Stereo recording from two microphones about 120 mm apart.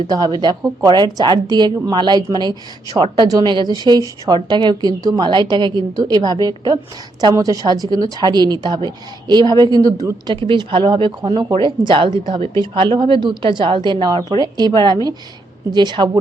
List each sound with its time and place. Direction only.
0.1 s a woman's voice: 30° right (ahead or behind)
10.4 s a woman's voice: 45° right (ahead or behind)